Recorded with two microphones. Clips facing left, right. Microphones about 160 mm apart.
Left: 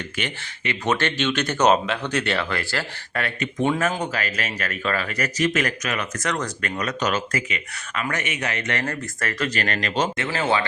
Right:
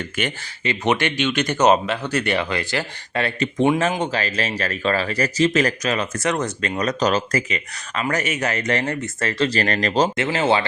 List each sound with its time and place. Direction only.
0.2 s speech: 50° right (ahead or behind)
0.9 s speech: 15° right (ahead or behind)
6.8 s speech: 35° right (ahead or behind)
8.8 s speech: 25° right (ahead or behind)